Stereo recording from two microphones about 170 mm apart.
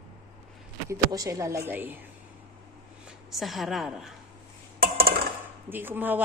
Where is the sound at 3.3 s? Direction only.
Centre (ahead or behind).